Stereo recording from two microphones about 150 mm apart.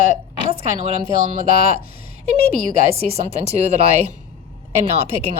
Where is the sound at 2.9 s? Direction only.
45° right (ahead or behind).